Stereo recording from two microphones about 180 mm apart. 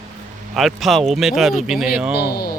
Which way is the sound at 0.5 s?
Centre (ahead or behind).